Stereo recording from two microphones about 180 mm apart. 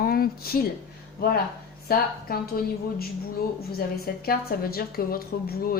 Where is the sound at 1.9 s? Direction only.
55° left (ahead or behind).